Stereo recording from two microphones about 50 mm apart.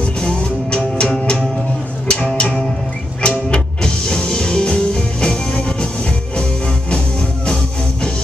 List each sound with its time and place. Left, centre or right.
0.0 s music: centre
6.9 s music: centre